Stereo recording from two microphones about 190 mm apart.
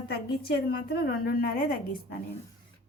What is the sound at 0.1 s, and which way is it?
A woman's voice, 55° left (ahead or behind).